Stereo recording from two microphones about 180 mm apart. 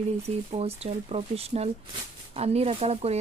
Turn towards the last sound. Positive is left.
turn(degrees=-35)  # may be behind; listen again after turning